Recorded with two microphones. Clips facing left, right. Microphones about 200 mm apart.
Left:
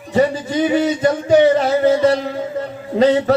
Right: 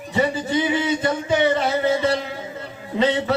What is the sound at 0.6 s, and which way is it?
A man's voice, 45° left (ahead or behind).